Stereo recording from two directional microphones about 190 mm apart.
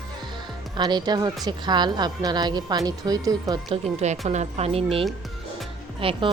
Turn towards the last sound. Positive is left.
turn(degrees=-25)  # may be behind; listen again after turning